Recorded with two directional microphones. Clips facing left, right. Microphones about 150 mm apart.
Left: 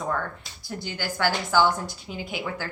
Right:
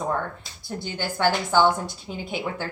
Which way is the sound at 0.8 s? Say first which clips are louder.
Right 2 dB; 25° right (ahead or behind).